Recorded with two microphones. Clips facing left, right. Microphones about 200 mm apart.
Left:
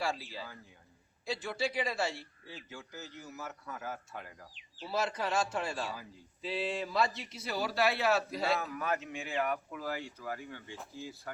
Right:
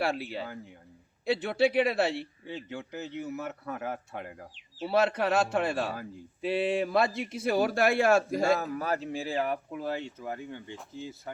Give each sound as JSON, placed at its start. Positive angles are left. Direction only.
{"t": 0.0, "sound": "a man's voice", "side_deg": -60}